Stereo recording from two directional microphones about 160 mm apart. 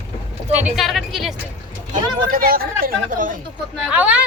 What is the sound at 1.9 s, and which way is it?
Speech, 65° right (ahead or behind).